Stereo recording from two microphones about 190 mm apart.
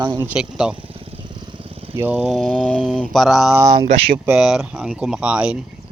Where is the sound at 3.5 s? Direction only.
20° right (ahead or behind).